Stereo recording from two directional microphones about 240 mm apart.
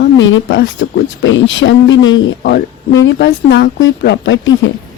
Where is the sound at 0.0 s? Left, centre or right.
Left.